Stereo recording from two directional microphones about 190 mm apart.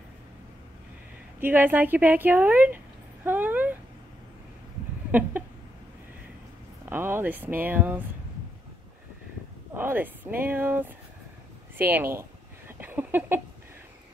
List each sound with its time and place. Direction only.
1.4 s a woman's voice: 10° right (ahead or behind)
5.1 s a woman's voice: 10° right (ahead or behind)
6.9 s a woman's voice: 10° right (ahead or behind)
9.8 s a woman's voice: 10° right (ahead or behind)
11.8 s a sound: 10° right (ahead or behind)